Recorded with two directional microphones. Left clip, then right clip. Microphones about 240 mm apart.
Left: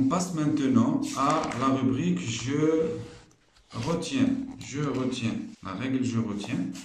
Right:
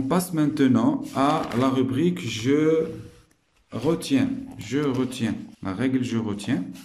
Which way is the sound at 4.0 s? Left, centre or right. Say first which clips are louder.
Right 3 dB; right.